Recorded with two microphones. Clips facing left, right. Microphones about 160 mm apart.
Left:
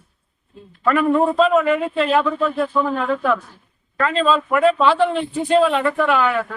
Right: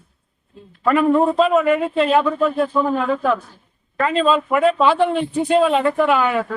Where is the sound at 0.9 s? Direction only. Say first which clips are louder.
Right 1 dB; 20° right (ahead or behind).